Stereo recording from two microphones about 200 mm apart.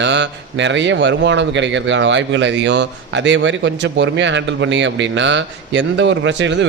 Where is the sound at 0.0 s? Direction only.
65° right (ahead or behind).